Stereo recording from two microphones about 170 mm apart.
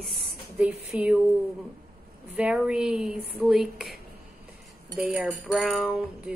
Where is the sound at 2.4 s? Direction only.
5° right (ahead or behind).